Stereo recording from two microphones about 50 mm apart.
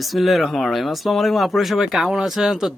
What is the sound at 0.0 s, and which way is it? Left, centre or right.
Speech, centre.